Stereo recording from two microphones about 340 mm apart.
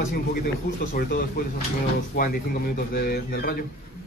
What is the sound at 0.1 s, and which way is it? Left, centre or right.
A man's voice, left.